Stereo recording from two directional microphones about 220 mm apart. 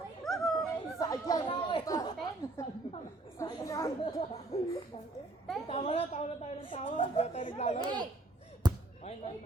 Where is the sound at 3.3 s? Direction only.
15° left (ahead or behind).